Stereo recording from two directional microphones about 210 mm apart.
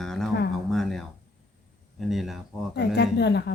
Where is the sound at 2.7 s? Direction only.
55° left (ahead or behind).